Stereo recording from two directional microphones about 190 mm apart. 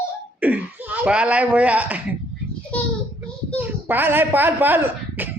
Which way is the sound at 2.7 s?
5° left (ahead or behind).